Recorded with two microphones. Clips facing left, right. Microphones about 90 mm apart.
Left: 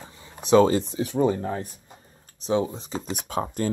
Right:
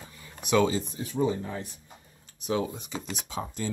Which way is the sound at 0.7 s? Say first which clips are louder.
Left 7 dB; 70° left (ahead or behind).